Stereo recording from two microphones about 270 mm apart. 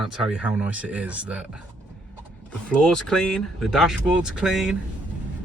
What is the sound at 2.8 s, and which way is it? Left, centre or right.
Speech, centre.